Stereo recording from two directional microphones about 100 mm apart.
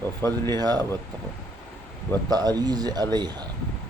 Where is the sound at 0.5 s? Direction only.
40° right (ahead or behind).